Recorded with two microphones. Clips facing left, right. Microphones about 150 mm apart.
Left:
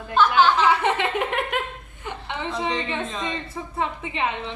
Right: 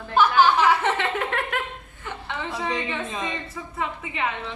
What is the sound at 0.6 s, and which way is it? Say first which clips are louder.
Laughter: left 1 dB; 15° left (ahead or behind).